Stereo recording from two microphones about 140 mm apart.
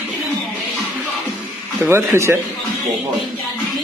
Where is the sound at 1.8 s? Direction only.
15° right (ahead or behind).